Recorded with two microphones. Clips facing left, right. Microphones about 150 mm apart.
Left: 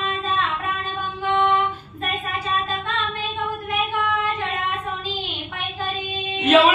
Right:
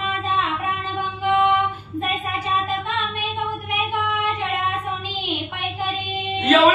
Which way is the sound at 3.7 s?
15° right (ahead or behind).